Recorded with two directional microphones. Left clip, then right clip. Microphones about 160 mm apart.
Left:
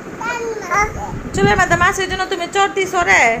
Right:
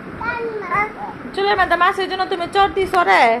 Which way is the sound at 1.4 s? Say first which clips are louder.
Left 2 dB; 5° left (ahead or behind).